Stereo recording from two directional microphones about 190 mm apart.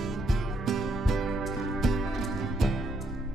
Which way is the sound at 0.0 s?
Centre (ahead or behind).